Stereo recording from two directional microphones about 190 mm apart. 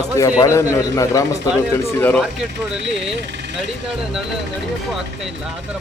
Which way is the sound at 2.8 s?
30° right (ahead or behind).